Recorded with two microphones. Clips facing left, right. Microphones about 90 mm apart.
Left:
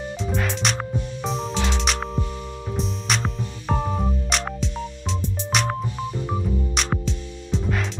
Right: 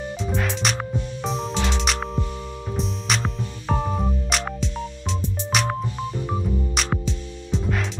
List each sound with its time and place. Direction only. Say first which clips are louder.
0.4 s music: even; centre (ahead or behind)